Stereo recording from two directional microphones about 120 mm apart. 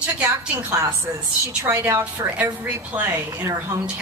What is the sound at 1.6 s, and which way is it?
Speech, 20° right (ahead or behind).